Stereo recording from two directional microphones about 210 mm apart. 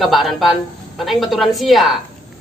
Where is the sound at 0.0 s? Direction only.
Centre (ahead or behind).